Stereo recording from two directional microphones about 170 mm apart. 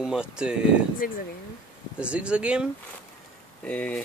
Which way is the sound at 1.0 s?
55° left (ahead or behind).